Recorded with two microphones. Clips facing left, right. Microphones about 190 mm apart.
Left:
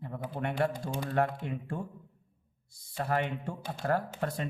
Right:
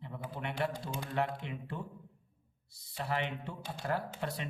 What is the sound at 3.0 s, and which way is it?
A man's voice, 45° left (ahead or behind).